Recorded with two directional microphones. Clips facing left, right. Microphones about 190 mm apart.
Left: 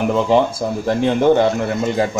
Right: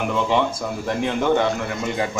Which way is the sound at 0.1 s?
35° left (ahead or behind).